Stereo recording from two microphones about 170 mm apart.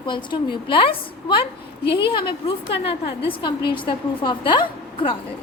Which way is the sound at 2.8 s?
30° left (ahead or behind).